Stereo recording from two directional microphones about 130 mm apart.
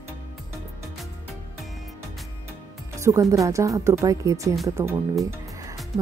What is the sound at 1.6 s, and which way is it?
Music, centre (ahead or behind).